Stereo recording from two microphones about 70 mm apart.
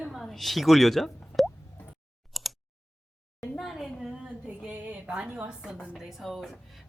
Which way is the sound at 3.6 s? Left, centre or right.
Centre.